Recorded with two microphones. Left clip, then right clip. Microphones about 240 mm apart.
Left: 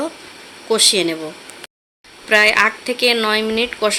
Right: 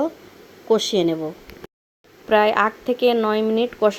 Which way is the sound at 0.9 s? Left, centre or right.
Centre.